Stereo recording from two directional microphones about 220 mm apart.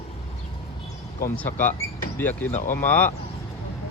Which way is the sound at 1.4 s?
10° left (ahead or behind).